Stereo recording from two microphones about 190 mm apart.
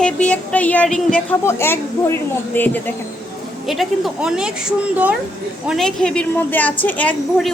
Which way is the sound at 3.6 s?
Centre (ahead or behind).